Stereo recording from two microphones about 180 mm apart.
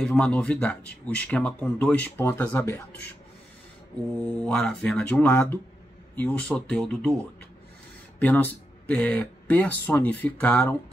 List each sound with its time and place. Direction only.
0.0 s speech: 5° left (ahead or behind)
4.2 s speech: 5° left (ahead or behind)
8.2 s speech: 10° left (ahead or behind)